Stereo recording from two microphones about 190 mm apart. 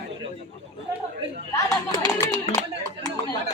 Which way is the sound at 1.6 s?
20° left (ahead or behind).